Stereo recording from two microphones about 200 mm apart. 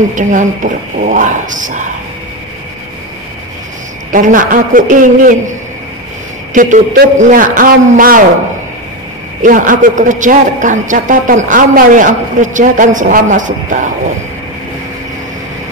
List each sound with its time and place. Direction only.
0.1 s a man's voice: 40° right (ahead or behind)
4.1 s a man's voice: 40° right (ahead or behind)
6.5 s a man's voice: 40° right (ahead or behind)
9.4 s a man's voice: 40° right (ahead or behind)